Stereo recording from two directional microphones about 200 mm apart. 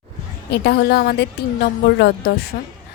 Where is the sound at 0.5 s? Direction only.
55° left (ahead or behind).